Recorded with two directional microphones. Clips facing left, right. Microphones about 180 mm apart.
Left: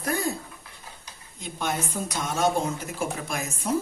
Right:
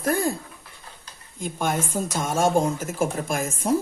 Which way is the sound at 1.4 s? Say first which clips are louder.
Right 4 dB; 50° right (ahead or behind).